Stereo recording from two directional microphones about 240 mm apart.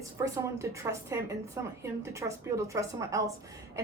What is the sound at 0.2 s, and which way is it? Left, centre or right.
A woman's voice, centre.